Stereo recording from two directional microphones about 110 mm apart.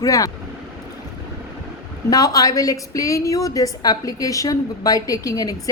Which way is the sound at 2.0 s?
35° left (ahead or behind).